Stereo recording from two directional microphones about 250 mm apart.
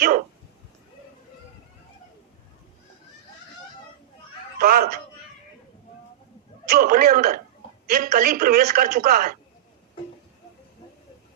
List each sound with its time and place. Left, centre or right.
4.6 s a woman's voice: right
6.7 s a woman's voice: right